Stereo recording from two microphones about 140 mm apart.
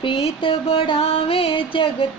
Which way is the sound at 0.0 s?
40° left (ahead or behind).